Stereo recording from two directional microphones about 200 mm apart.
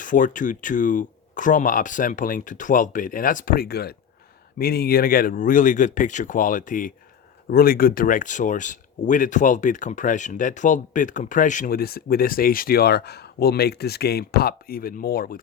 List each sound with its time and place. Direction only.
0.0 s speech: 40° left (ahead or behind)